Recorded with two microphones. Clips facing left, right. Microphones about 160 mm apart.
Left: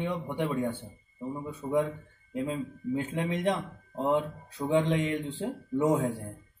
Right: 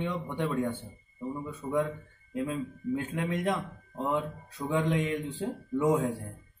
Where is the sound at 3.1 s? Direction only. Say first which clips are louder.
Left 2 dB; 25° left (ahead or behind).